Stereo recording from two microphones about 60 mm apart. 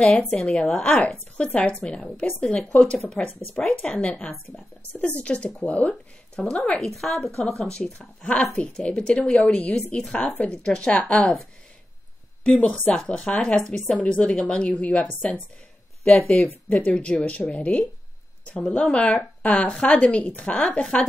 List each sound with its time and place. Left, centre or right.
0.4 s speech: centre
12.4 s speech: centre
16.3 s speech: centre